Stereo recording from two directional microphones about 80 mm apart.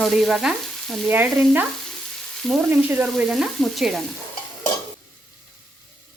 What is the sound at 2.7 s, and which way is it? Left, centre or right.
Frying, right.